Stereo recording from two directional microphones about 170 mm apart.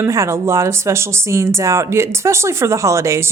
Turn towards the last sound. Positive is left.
turn(degrees=-15)  # may be behind; listen again after turning